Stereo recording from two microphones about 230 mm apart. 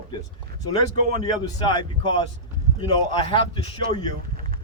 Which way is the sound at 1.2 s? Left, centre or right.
Centre.